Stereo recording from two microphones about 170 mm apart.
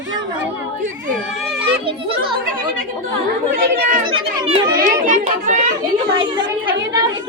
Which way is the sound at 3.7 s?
55° right (ahead or behind).